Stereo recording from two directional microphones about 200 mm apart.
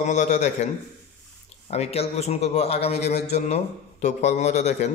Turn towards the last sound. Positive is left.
turn(degrees=35)  # may be behind; listen again after turning